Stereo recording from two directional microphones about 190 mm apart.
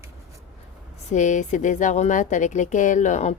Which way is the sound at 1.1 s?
40° left (ahead or behind).